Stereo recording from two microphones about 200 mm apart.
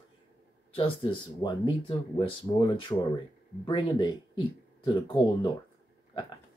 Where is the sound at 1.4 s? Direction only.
25° left (ahead or behind).